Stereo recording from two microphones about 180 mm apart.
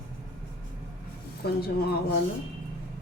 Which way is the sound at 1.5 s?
60° left (ahead or behind).